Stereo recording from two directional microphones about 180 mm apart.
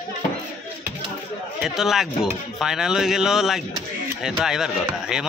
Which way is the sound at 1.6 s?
Centre (ahead or behind).